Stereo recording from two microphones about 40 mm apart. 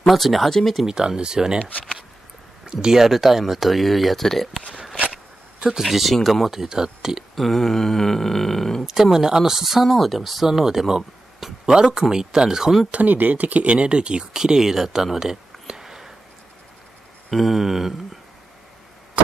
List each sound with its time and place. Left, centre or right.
0.0 s speech: centre
0.8 s speech: centre
2.6 s speech: centre
5.8 s speech: centre
7.3 s speech: centre
8.8 s speech: centre
9.8 s speech: centre
12.9 s speech: right
14.3 s speech: centre
17.3 s speech: centre